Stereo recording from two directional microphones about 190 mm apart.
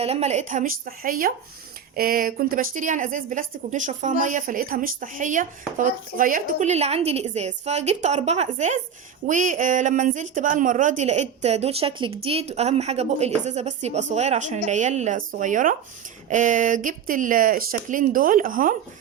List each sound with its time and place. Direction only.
0.0 s a woman's voice: 35° right (ahead or behind)